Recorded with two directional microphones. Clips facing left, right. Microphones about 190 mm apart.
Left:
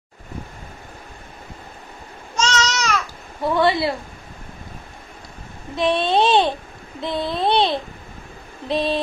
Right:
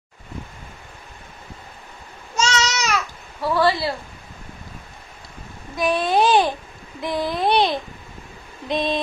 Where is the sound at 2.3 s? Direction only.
10° right (ahead or behind).